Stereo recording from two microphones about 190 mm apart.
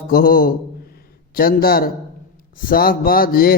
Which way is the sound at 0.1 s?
50° left (ahead or behind).